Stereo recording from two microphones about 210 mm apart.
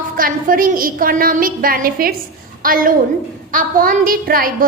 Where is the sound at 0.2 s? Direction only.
40° right (ahead or behind).